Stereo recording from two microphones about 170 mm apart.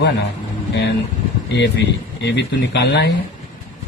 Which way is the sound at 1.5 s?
90° left.